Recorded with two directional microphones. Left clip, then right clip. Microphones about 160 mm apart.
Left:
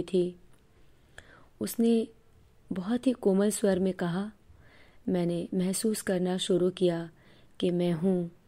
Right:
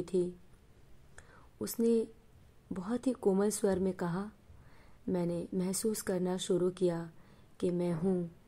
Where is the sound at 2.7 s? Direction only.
25° left (ahead or behind).